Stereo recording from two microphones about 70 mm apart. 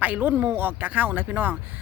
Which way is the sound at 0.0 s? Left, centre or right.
Right.